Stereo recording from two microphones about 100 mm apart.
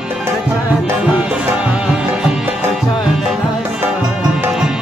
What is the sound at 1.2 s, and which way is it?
Music, 15° right (ahead or behind).